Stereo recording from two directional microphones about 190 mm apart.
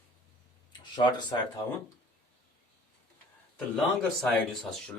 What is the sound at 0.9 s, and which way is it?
Speech, 25° left (ahead or behind).